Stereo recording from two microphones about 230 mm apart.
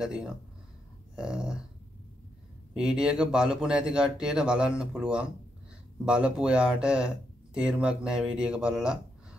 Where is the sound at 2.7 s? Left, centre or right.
Centre.